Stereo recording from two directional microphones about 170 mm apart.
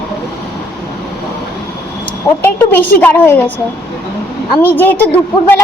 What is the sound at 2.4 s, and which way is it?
A woman's voice, 10° left (ahead or behind).